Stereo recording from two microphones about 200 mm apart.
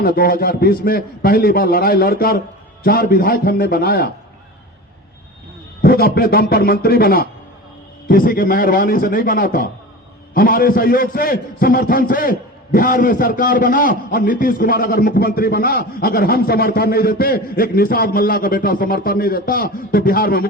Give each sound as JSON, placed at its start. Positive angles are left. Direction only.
{"t": 0.0, "sound": "a man's voice", "side_deg": 45}
{"t": 5.8, "sound": "a man's voice", "side_deg": 50}